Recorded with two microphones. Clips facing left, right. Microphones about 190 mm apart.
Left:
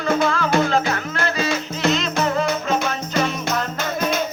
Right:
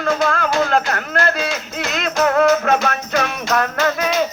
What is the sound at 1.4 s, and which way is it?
Music, 55° left (ahead or behind).